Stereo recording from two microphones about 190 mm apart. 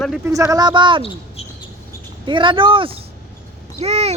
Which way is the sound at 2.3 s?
25° right (ahead or behind).